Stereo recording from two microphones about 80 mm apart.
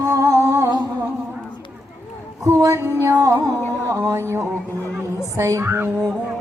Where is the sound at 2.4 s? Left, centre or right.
Right.